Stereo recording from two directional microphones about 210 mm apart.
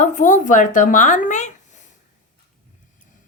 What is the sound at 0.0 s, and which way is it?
Speech, 35° left (ahead or behind).